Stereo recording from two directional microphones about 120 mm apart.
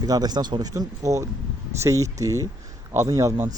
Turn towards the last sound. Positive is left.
turn(degrees=-25)  # may be behind; listen again after turning